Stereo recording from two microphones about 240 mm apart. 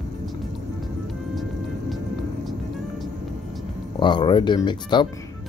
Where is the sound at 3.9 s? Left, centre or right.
Centre.